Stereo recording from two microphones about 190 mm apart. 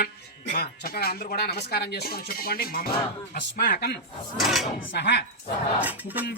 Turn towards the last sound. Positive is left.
turn(degrees=-10)  # may be behind; listen again after turning